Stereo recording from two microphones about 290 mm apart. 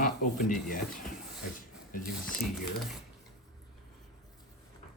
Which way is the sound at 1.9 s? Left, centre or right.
Left.